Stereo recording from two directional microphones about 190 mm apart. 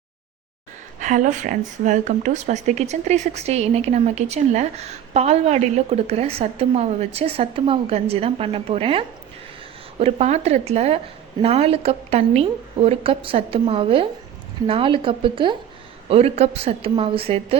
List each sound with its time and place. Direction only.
0.9 s speech: 40° right (ahead or behind)